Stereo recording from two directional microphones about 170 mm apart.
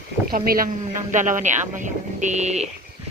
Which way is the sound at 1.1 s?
45° right (ahead or behind).